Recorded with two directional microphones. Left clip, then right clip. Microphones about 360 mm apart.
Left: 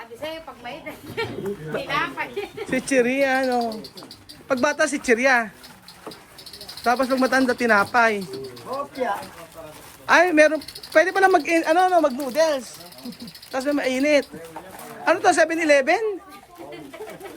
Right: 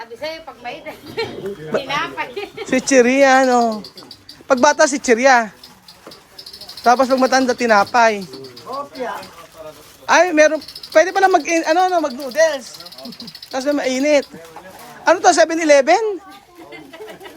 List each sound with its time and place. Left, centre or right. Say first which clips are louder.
0.2 s a woman's voice: right 4 dB; right
6.8 s speech: right 7 dB; centre
10.1 s speech: right 3 dB; centre